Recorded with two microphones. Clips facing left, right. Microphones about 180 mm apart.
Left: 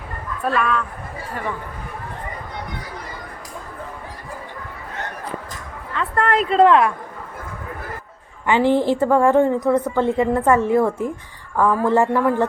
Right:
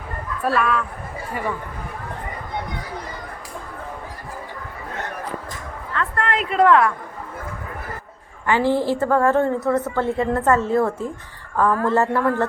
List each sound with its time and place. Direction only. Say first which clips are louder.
0.4 s speech: even; 5° right (ahead or behind)
6.1 s a woman's voice: left 4 dB; 40° left (ahead or behind); by 6.9 s 20° left (ahead or behind)
8.4 s a woman's voice: left 2 dB; 20° left (ahead or behind)